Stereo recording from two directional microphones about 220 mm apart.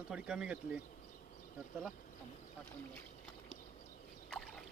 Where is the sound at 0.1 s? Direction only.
5° right (ahead or behind).